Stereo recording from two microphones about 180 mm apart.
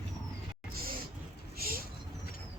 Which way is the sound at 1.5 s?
55° right (ahead or behind).